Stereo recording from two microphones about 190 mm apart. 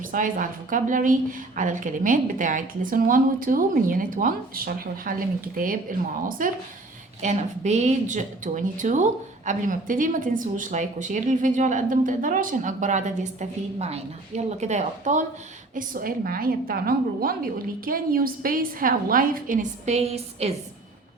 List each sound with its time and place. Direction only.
0.0 s a woman's voice: 45° right (ahead or behind)